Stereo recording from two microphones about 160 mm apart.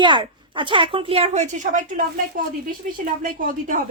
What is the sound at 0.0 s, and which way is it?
A woman's voice, 30° right (ahead or behind).